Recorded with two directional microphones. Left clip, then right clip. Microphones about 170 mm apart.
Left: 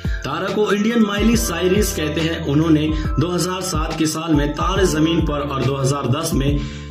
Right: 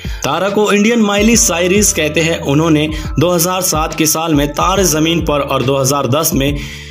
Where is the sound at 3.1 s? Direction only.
40° right (ahead or behind).